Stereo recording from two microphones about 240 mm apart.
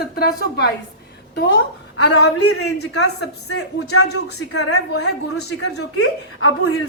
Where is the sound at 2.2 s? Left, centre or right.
Left.